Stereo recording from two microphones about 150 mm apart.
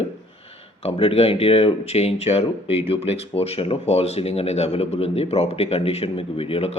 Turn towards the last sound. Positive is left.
turn(degrees=40)  # may be behind; listen again after turning